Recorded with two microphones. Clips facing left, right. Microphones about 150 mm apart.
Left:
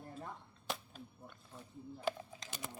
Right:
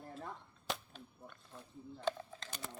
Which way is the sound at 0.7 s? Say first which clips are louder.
Right 1 dB; centre (ahead or behind).